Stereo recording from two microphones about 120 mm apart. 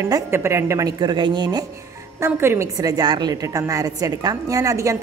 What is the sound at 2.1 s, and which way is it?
A woman's voice, 20° right (ahead or behind).